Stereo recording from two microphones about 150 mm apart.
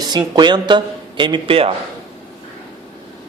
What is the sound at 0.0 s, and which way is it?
Speech, 30° right (ahead or behind).